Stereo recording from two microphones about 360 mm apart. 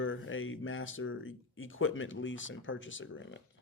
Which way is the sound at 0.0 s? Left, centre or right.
Left.